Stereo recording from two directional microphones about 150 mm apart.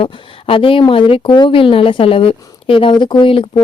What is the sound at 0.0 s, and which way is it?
Speech, 35° left (ahead or behind).